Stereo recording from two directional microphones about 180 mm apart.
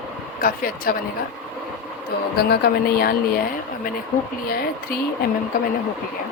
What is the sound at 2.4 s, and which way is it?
Speech, 60° left (ahead or behind).